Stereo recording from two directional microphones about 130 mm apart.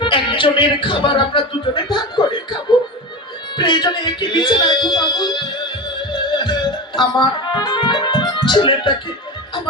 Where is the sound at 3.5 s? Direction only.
35° left (ahead or behind).